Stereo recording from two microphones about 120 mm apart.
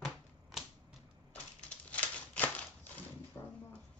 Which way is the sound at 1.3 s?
10° left (ahead or behind).